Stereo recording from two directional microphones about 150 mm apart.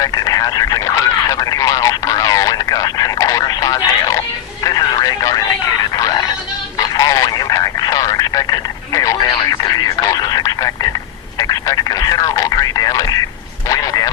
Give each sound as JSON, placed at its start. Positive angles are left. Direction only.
{"t": 0.0, "sound": "speech", "side_deg": 25}
{"t": 13.7, "sound": "vehicle", "side_deg": 25}